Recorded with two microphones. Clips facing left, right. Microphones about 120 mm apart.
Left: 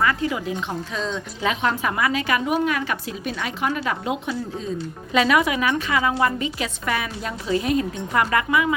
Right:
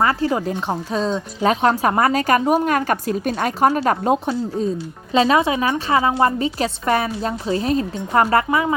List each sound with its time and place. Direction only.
0.0 s a woman's voice: 35° right (ahead or behind)
5.1 s a woman's voice: 30° right (ahead or behind)